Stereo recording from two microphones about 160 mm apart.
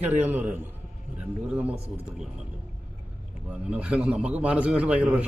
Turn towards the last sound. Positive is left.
turn(degrees=-10)  # may be behind; listen again after turning